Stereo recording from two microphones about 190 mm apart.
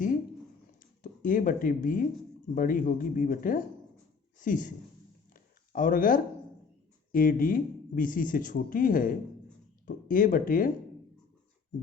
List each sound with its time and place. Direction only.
0.8 s speech: 45° left (ahead or behind)
5.3 s a sound: 45° left (ahead or behind)
7.1 s speech: 45° left (ahead or behind)